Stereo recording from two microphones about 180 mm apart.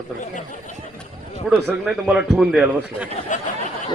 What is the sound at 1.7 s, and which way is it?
Speech, 5° right (ahead or behind).